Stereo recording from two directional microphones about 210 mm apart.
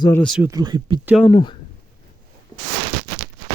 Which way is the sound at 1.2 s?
20° left (ahead or behind).